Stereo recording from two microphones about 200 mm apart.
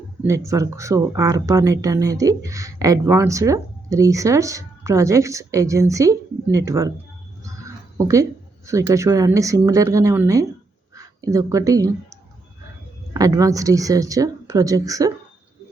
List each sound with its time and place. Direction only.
0.3 s speech: 15° right (ahead or behind)
13.1 s speech: 15° right (ahead or behind)